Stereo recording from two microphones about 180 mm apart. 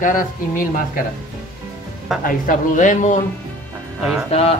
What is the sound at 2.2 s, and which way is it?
Speech, 50° left (ahead or behind).